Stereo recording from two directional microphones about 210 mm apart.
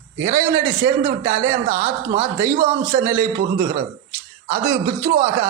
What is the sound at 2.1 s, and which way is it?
Speech, 10° right (ahead or behind).